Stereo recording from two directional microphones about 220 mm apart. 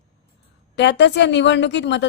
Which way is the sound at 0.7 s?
50° left (ahead or behind).